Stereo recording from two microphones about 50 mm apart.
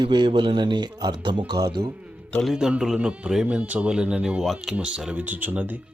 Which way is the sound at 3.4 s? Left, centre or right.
Right.